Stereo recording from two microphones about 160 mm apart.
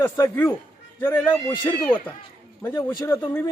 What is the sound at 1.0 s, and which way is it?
A man's voice, 10° left (ahead or behind).